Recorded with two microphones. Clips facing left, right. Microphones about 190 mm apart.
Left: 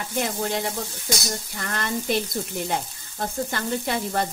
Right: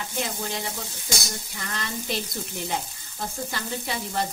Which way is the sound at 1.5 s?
55° left (ahead or behind).